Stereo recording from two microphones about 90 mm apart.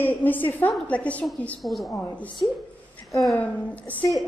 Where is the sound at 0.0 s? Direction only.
20° left (ahead or behind).